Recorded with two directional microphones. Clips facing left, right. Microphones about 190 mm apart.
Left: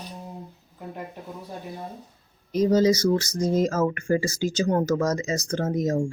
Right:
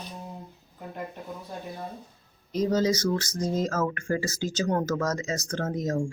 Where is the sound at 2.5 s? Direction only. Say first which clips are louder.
Left 5 dB; 15° left (ahead or behind).